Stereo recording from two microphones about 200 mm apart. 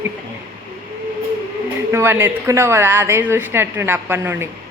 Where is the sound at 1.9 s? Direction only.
10° right (ahead or behind).